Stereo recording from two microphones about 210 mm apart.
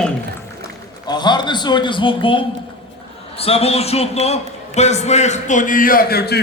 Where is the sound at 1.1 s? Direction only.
20° left (ahead or behind).